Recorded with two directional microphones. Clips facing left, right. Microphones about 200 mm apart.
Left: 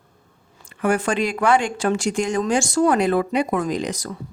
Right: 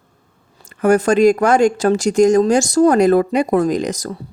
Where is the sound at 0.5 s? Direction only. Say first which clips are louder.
Right 7 dB; 40° right (ahead or behind).